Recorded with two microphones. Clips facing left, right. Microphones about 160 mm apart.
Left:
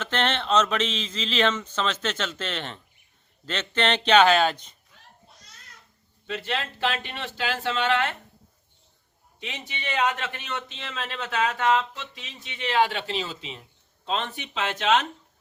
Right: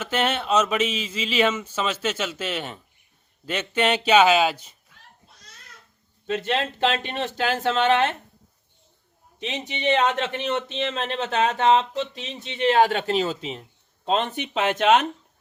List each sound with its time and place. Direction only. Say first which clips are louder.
0.0 s speech: right 2 dB; 10° right (ahead or behind)
6.2 s speech: right 6 dB; 45° right (ahead or behind)
7.9 s a man's voice: right 4 dB; 20° right (ahead or behind)
9.5 s a man's voice: right 10 dB; 25° right (ahead or behind)
12.6 s a man's voice: right 5 dB; 45° right (ahead or behind)